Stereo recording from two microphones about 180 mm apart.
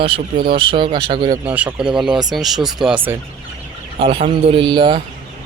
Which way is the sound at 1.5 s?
5° right (ahead or behind).